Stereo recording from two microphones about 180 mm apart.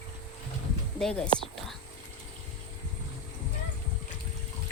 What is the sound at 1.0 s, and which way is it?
Whispering, 5° left (ahead or behind).